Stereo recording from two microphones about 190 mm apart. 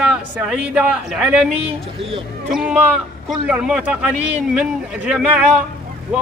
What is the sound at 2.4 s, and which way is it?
A man's voice, 5° right (ahead or behind).